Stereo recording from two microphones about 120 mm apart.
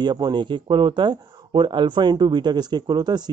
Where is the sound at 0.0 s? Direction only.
35° right (ahead or behind).